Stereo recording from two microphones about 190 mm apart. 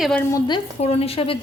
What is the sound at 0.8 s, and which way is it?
Speech, 30° left (ahead or behind).